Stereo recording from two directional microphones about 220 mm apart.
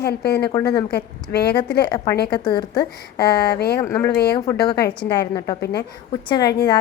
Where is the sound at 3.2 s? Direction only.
45° left (ahead or behind).